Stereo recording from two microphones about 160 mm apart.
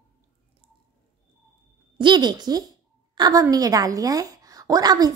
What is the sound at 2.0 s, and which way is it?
A woman's voice, 25° right (ahead or behind).